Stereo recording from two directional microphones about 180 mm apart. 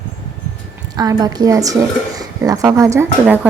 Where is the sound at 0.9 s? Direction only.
20° right (ahead or behind).